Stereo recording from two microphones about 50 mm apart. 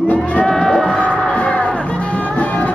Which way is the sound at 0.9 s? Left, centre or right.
Left.